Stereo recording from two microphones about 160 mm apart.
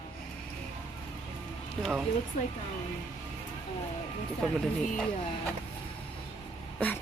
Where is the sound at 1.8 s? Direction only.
Centre (ahead or behind).